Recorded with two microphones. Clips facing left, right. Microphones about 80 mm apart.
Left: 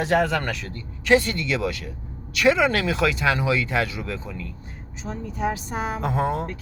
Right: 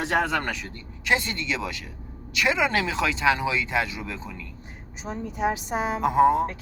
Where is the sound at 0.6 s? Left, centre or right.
Centre.